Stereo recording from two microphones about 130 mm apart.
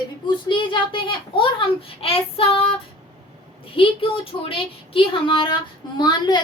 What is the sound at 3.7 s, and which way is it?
A child's voice, 45° left (ahead or behind).